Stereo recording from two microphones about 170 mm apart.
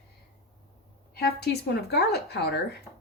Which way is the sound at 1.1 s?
70° left (ahead or behind).